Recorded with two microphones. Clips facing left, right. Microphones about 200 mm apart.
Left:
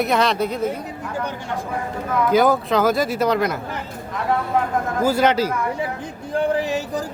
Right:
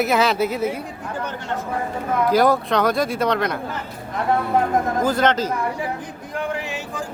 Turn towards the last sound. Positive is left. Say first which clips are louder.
# left 6 dB
turn(degrees=35)  # may be behind; listen again after turning